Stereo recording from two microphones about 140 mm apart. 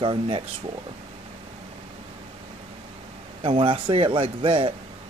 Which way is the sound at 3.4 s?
40° right (ahead or behind).